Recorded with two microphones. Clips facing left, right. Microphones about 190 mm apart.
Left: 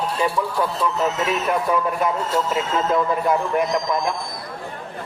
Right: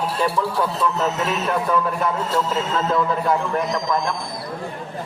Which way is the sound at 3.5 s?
15° left (ahead or behind).